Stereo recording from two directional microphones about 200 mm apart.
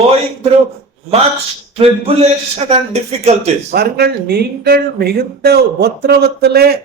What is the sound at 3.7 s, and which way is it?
Speech, 50° right (ahead or behind).